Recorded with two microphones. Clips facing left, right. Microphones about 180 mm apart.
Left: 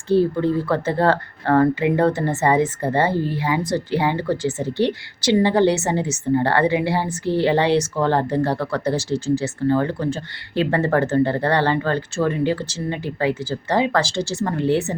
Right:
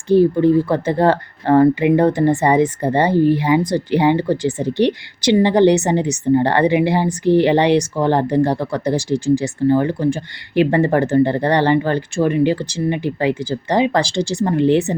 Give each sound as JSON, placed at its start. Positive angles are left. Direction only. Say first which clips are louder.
{"t": 0.1, "sound": "a woman's voice", "louder": "right 5 dB", "side_deg": -15}